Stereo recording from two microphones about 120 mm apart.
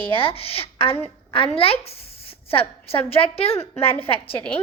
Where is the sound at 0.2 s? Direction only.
50° left (ahead or behind).